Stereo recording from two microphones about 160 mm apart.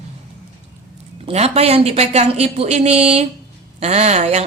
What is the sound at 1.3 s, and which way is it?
A woman's voice, 40° right (ahead or behind).